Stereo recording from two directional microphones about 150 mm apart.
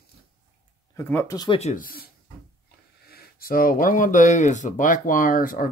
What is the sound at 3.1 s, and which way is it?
Speech, 85° left.